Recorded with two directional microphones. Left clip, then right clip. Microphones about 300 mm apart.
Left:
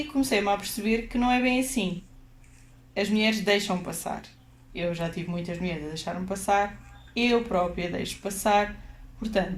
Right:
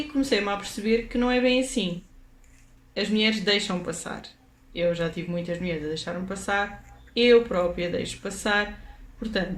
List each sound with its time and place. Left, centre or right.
0.2 s speech: centre
2.9 s speech: centre